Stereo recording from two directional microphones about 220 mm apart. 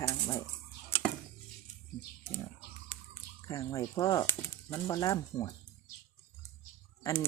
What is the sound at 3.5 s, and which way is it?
Speech, 15° left (ahead or behind).